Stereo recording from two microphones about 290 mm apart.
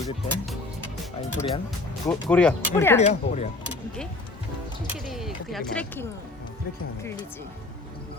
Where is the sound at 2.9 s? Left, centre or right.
Left.